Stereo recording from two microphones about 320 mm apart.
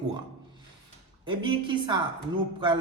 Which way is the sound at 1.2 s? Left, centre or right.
Centre.